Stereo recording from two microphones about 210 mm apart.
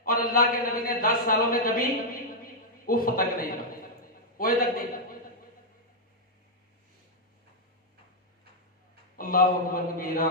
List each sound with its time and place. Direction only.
0.0 s a man's voice: 45° left (ahead or behind)
9.1 s a man's voice: 45° left (ahead or behind)